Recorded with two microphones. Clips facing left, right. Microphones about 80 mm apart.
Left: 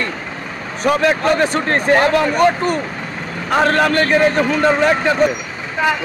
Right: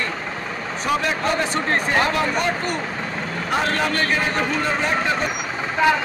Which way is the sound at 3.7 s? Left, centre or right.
Left.